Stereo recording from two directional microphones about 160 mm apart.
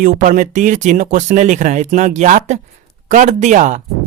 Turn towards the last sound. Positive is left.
turn(degrees=-50)  # may be behind; listen again after turning